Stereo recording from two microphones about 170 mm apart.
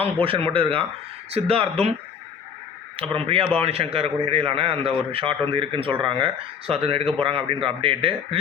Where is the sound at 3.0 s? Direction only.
30° right (ahead or behind).